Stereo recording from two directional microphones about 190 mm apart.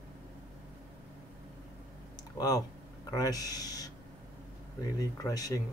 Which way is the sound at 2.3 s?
20° left (ahead or behind).